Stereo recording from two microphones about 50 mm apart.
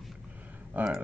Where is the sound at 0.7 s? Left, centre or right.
Right.